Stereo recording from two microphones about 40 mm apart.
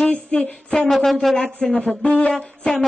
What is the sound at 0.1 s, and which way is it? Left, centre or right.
Speech, left.